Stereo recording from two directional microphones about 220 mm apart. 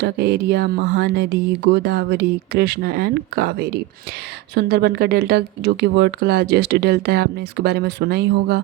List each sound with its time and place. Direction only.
0.0 s speech: 45° right (ahead or behind)